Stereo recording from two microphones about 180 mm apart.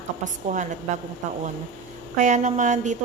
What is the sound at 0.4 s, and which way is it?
A woman's voice, 40° right (ahead or behind).